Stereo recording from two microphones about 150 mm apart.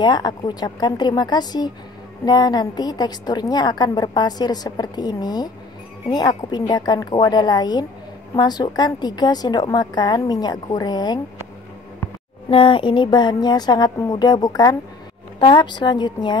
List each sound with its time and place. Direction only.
0.0 s a woman's voice: 30° left (ahead or behind)
12.4 s a woman's voice: 35° left (ahead or behind)